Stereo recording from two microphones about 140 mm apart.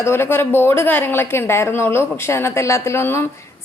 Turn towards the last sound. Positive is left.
turn(degrees=20)  # may be behind; listen again after turning